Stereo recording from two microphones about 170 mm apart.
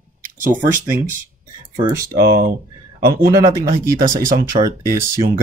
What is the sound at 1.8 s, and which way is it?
Speech, 20° right (ahead or behind).